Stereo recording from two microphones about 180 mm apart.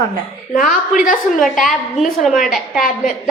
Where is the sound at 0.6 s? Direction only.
50° left (ahead or behind).